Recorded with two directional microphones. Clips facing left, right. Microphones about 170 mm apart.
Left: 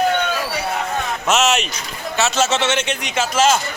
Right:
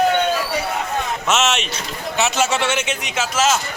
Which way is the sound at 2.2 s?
15° right (ahead or behind).